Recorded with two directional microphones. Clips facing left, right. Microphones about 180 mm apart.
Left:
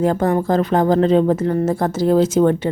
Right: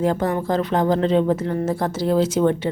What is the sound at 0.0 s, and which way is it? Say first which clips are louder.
Speech: left 4 dB; 45° left (ahead or behind).